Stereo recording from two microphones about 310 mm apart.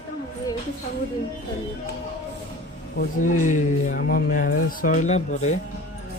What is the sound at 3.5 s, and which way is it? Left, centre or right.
Speech, left.